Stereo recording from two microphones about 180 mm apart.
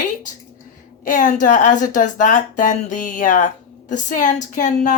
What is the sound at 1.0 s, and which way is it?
Speech, 45° left (ahead or behind).